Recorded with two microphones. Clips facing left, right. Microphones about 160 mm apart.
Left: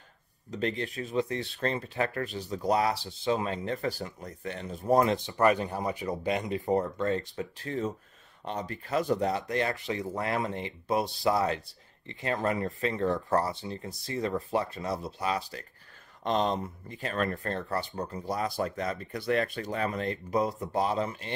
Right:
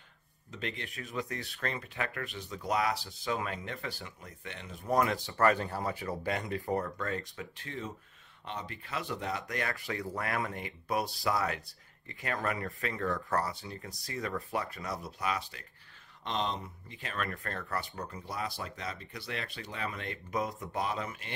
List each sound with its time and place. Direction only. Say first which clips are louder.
0.5 s speech: left 9 dB; 35° left (ahead or behind)
16.3 s speech: left 7 dB; 45° left (ahead or behind)